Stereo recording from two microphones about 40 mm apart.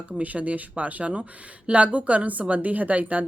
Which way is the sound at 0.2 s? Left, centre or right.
Right.